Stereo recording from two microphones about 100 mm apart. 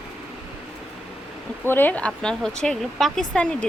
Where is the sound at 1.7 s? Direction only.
20° left (ahead or behind).